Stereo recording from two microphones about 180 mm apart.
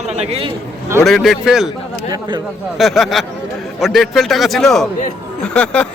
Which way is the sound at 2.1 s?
25° right (ahead or behind).